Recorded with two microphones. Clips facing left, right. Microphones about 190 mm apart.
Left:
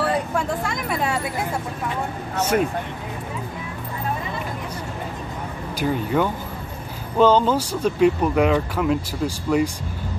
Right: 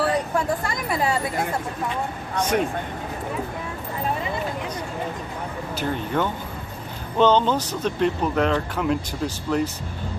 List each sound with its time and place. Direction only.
0.0 s speech: centre (ahead or behind)
5.8 s speech: 10° left (ahead or behind)